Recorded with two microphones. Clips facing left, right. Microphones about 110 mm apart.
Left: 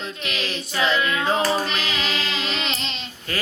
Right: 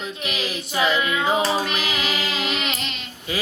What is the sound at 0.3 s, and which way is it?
Music, 10° right (ahead or behind).